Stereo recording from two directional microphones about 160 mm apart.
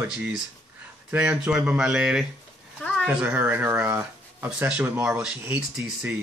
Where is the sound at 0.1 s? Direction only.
5° right (ahead or behind).